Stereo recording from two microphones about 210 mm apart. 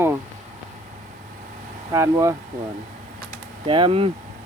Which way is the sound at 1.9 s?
15° right (ahead or behind).